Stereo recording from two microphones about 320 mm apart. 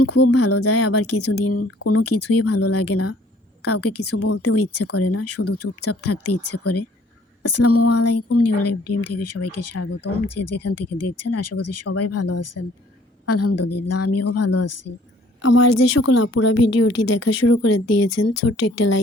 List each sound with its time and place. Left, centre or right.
0.0 s speech: left
16.5 s a woman's voice: left
16.9 s speech: left